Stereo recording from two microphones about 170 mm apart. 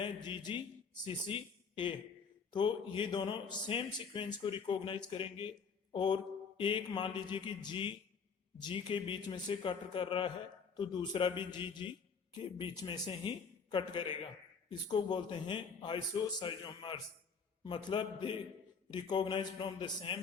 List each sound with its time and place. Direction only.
0.0 s speech: 25° left (ahead or behind)